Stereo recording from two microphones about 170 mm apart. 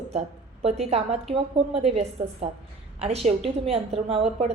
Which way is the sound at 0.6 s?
35° right (ahead or behind).